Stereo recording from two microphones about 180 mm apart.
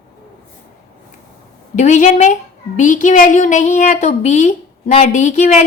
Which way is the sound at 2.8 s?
45° left (ahead or behind).